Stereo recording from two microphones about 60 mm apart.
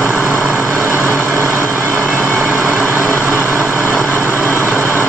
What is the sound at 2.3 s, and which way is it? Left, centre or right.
Vehicle, centre.